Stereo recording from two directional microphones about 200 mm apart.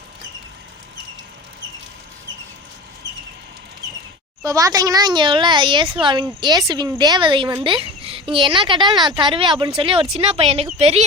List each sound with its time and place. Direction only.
4.4 s a woman's voice: 15° right (ahead or behind); by 11.0 s 30° right (ahead or behind)